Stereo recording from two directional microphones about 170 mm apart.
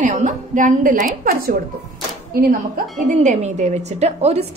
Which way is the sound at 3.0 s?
45° right (ahead or behind).